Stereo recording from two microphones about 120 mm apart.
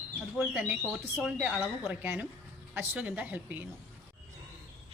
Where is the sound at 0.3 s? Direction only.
10° right (ahead or behind).